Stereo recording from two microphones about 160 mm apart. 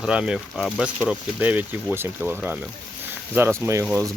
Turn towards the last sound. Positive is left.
turn(degrees=-15)  # may be behind; listen again after turning